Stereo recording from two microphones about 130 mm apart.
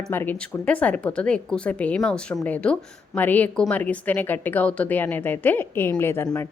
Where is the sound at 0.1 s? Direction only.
15° left (ahead or behind).